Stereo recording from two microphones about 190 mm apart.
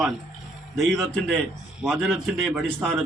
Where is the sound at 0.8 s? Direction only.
5° left (ahead or behind).